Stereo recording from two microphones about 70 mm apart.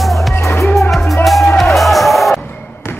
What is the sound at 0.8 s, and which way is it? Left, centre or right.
Music, centre.